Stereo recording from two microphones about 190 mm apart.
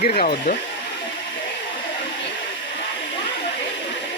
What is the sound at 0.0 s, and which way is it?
Speech, 50° left (ahead or behind).